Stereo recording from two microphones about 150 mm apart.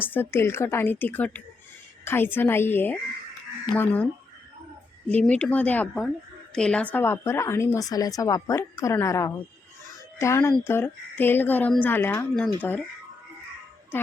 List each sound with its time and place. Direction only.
0.0 s a woman's voice: 15° left (ahead or behind)